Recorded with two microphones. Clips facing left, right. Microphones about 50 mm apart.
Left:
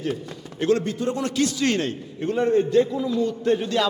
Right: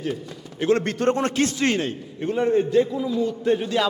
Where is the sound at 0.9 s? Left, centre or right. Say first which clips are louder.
Right 4 dB; right.